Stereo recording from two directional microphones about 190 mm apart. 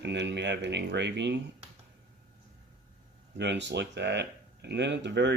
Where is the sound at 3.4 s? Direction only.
65° right (ahead or behind).